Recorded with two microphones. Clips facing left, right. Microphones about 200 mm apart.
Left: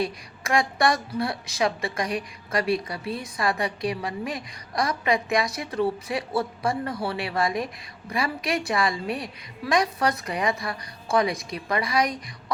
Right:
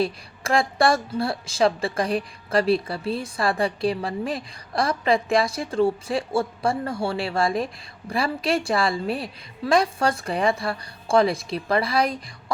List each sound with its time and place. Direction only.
0.0 s a woman's voice: 30° right (ahead or behind)